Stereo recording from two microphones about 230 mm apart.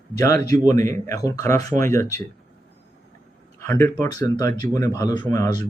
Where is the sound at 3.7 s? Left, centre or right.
Centre.